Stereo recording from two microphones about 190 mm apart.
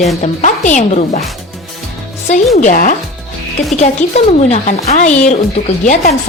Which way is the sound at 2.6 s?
40° left (ahead or behind).